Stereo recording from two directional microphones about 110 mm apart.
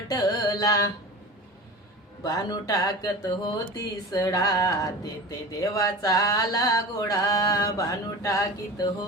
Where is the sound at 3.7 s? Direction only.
30° left (ahead or behind).